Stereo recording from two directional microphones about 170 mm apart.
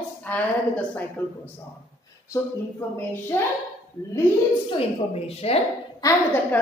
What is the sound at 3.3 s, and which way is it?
Speech, 10° left (ahead or behind).